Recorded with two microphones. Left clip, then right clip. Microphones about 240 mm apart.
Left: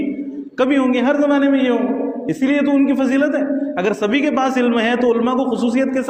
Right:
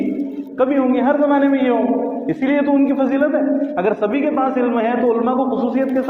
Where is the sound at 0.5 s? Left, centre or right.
Left.